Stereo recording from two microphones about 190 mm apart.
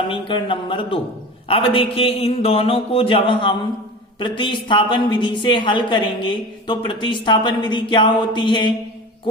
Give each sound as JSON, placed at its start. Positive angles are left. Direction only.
{"t": 0.1, "sound": "a woman's voice", "side_deg": 25}